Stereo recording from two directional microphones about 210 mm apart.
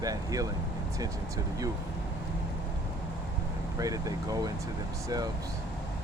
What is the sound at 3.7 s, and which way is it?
Speech, 15° right (ahead or behind).